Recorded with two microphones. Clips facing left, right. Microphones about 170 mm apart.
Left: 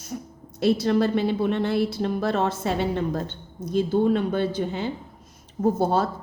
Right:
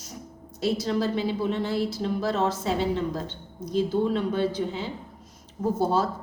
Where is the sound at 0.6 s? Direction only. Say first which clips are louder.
Left 5 dB; 60° left (ahead or behind).